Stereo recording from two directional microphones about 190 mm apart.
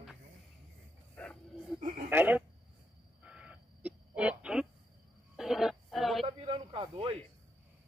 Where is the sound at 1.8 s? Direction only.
35° right (ahead or behind).